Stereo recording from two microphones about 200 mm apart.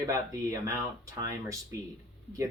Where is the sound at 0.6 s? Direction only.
15° right (ahead or behind).